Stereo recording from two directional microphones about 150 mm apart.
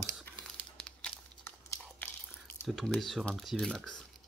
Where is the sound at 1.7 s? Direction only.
15° left (ahead or behind).